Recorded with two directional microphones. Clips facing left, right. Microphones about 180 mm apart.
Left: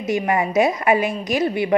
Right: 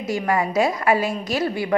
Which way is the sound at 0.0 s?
20° left (ahead or behind).